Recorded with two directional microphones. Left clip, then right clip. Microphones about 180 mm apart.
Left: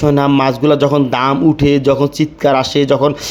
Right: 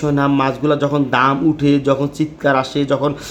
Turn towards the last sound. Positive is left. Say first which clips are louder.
# left 5 dB
turn(degrees=35)  # may be behind; listen again after turning